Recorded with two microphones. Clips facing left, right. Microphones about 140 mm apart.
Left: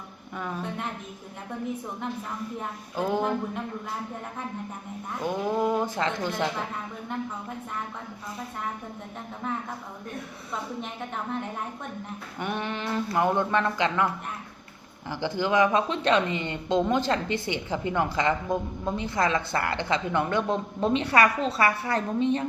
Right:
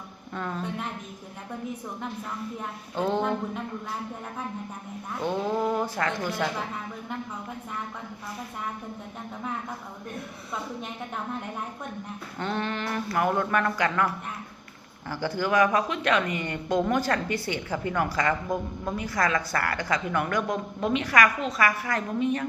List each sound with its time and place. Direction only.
0.3 s speech: 10° left (ahead or behind)
2.9 s speech: 10° left (ahead or behind)
5.2 s speech: 10° left (ahead or behind)
12.4 s a woman's voice: 15° left (ahead or behind)
15.1 s a woman's voice: 20° left (ahead or behind)